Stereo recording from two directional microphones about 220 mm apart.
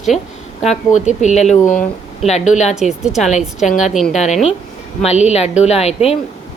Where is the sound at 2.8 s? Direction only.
Centre (ahead or behind).